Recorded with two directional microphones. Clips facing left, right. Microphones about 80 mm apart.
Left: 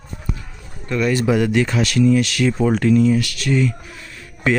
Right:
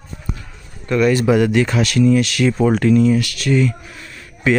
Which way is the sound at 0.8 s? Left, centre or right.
Right.